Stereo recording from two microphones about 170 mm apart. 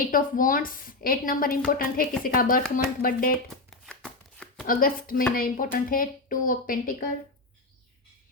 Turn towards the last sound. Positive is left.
turn(degrees=55)  # may be behind; listen again after turning